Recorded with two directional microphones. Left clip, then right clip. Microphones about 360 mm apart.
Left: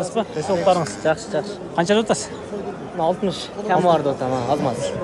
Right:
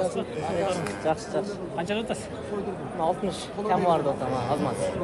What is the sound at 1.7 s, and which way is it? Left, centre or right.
Speech, centre.